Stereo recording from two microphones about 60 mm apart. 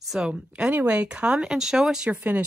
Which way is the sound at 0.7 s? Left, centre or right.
Right.